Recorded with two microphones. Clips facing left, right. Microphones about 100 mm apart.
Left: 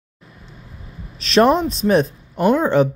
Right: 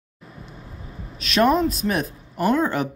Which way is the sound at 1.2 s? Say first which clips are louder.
Left 4 dB; 30° left (ahead or behind).